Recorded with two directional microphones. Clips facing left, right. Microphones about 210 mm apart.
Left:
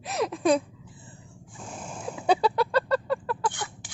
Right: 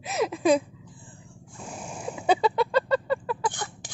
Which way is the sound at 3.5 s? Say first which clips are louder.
Right 1 dB; 40° right (ahead or behind).